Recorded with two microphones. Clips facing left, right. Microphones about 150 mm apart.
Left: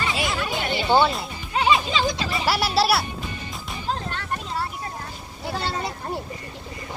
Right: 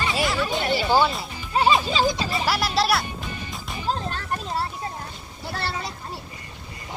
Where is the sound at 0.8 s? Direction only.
5° right (ahead or behind).